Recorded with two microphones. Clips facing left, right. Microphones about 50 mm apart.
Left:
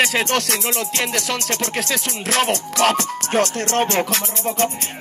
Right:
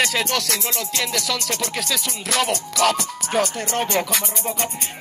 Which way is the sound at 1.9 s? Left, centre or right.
Left.